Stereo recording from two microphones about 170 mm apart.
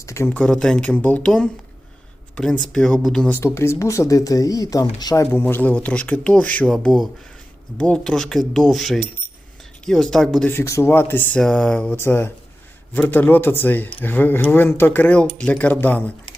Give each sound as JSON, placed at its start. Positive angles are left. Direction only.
{"t": 0.0, "sound": "speech", "side_deg": 15}
{"t": 3.4, "sound": "speech", "side_deg": 15}
{"t": 10.5, "sound": "speech", "side_deg": 15}